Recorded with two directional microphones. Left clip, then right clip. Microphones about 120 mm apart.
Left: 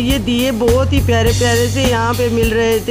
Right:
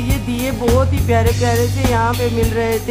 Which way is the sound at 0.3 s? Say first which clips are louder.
Left 3 dB; 35° left (ahead or behind).